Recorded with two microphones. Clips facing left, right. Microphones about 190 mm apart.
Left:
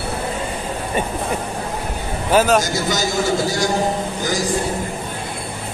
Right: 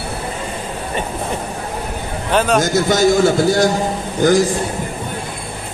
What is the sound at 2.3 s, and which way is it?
Speech, 5° left (ahead or behind).